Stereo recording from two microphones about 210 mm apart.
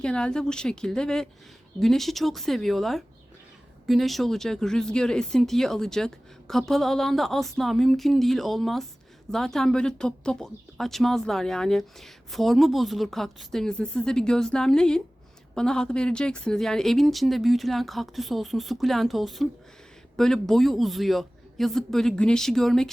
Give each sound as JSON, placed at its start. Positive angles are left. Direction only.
{"t": 0.0, "sound": "speech", "side_deg": 5}